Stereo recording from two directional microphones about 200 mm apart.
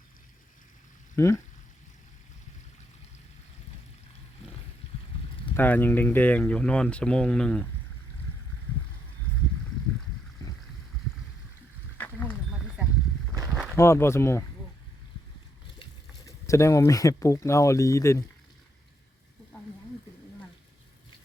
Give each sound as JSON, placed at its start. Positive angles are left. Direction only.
{"t": 1.1, "sound": "speech", "side_deg": 15}
{"t": 5.5, "sound": "speech", "side_deg": 10}
{"t": 10.4, "sound": "boat", "side_deg": 20}
{"t": 13.3, "sound": "a sound", "side_deg": -15}
{"t": 13.7, "sound": "speech", "side_deg": 15}
{"t": 15.8, "sound": "speech", "side_deg": 15}